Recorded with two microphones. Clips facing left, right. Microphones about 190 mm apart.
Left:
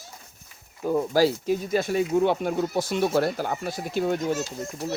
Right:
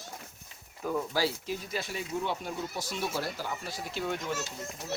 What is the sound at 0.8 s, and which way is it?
Speech, 30° left (ahead or behind).